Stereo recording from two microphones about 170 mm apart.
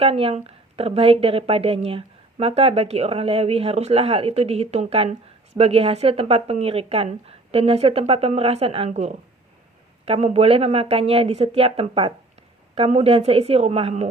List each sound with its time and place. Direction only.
0.0 s a woman's voice: 35° right (ahead or behind)